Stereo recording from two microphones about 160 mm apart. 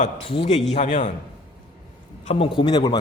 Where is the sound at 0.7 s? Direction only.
50° left (ahead or behind).